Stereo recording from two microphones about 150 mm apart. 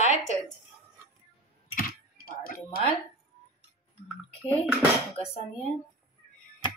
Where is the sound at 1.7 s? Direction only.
70° left (ahead or behind).